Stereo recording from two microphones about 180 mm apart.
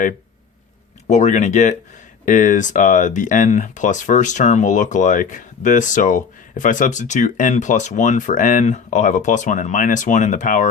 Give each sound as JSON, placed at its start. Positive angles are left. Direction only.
{"t": 1.0, "sound": "speech", "side_deg": 40}